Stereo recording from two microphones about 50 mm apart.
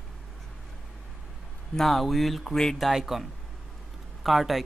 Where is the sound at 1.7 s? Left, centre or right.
Centre.